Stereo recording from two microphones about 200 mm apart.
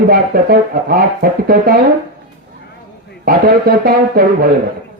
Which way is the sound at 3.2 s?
45° right (ahead or behind).